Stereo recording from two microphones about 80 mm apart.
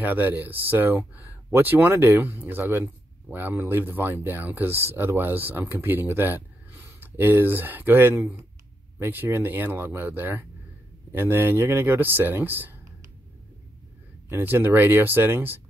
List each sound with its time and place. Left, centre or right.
0.0 s speech: right
14.3 s speech: right